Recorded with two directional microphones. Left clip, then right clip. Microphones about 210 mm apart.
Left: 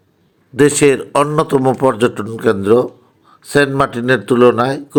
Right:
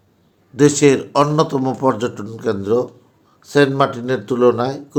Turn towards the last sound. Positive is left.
turn(degrees=30)  # may be behind; listen again after turning